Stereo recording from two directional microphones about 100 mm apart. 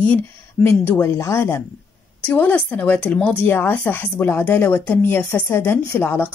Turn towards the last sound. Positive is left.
turn(degrees=20)  # may be behind; listen again after turning